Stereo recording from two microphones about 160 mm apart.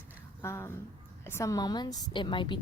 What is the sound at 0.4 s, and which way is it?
A woman's voice, 15° left (ahead or behind).